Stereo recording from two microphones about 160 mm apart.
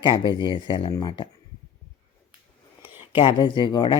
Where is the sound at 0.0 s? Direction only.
30° left (ahead or behind).